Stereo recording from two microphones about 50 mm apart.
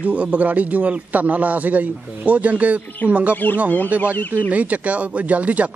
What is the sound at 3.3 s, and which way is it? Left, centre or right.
Speech, left.